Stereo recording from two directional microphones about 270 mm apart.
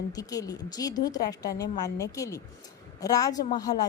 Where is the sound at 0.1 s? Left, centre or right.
Centre.